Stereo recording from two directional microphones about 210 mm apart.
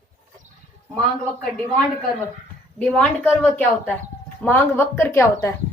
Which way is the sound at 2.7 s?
5° left (ahead or behind).